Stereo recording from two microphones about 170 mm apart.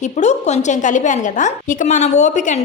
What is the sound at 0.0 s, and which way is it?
A woman's voice, 40° left (ahead or behind).